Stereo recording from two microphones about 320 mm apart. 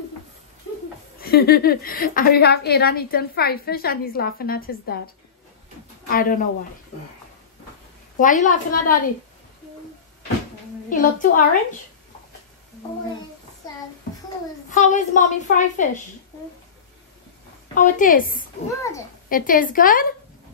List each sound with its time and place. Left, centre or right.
1.2 s a woman's voice: left
8.2 s a woman's voice: left
10.9 s a woman's voice: left
13.6 s child singing: centre
14.7 s a woman's voice: left
17.7 s a woman's voice: left
18.8 s a child's voice: centre
19.2 s a woman's voice: left